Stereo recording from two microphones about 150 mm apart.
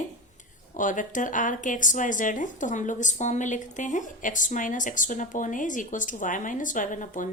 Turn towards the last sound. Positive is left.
turn(degrees=60)  # may be behind; listen again after turning